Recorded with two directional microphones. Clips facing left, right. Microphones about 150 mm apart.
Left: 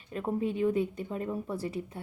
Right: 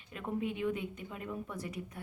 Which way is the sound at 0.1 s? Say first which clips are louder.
Left 5 dB; 35° left (ahead or behind).